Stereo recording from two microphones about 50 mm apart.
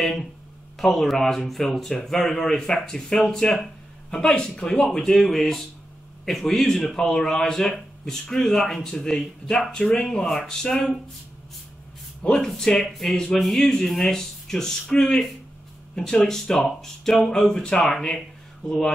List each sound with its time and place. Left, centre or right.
0.0 s a man's voice: centre
12.2 s a man's voice: centre